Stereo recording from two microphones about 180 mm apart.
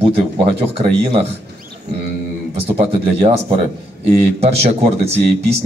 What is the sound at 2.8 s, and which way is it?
Speech, 30° right (ahead or behind).